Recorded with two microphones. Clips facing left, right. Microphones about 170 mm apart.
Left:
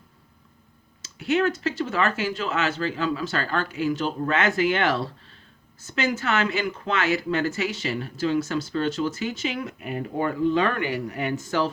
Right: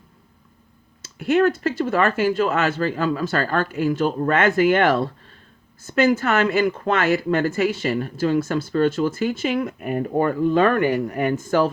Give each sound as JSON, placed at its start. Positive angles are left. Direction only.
{"t": 1.0, "sound": "speech", "side_deg": -50}